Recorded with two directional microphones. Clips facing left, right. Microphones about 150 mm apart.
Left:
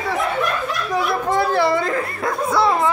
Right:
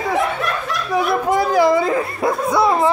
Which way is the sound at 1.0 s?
Centre (ahead or behind).